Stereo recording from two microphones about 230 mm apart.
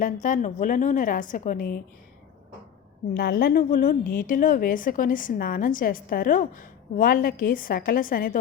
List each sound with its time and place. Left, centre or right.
0.0 s a woman's voice: left
3.2 s a woman's voice: left